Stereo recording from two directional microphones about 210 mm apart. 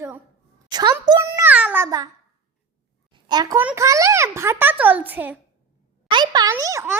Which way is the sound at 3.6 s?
15° right (ahead or behind).